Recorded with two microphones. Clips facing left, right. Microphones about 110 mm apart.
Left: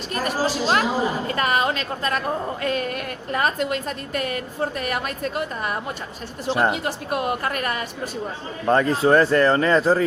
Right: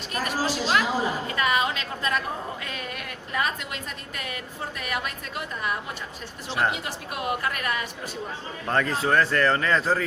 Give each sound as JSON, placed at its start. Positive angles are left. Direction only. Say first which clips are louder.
{"t": 0.1, "sound": "a woman's voice", "louder": "left 4 dB", "side_deg": 40}
{"t": 8.6, "sound": "speech", "louder": "left 7 dB", "side_deg": 20}